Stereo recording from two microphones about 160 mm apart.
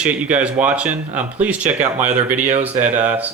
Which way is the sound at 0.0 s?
10° right (ahead or behind).